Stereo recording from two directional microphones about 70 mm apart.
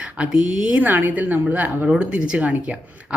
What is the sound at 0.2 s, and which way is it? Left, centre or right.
Speech, centre.